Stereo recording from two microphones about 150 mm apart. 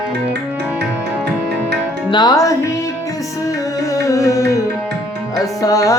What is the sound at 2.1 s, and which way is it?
Music, 30° left (ahead or behind).